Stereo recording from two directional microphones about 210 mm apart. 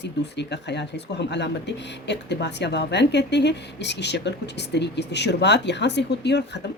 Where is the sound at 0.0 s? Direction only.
55° left (ahead or behind).